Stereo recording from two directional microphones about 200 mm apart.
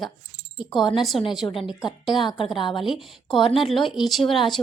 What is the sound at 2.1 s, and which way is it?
Speech, centre (ahead or behind).